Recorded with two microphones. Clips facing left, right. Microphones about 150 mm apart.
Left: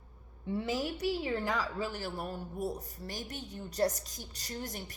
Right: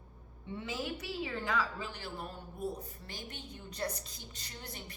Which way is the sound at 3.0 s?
40° left (ahead or behind).